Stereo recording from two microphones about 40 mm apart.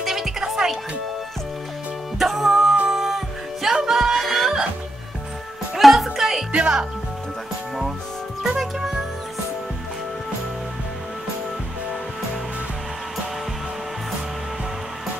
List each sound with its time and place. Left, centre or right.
0.0 s music: centre
2.1 s music: centre
4.2 s music: centre
5.8 s music: centre
6.5 s speech: right
8.5 s music: centre